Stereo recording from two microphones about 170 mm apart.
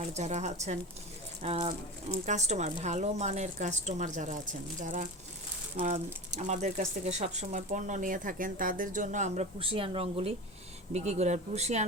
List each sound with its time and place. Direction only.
0.0 s speech: 40° right (ahead or behind)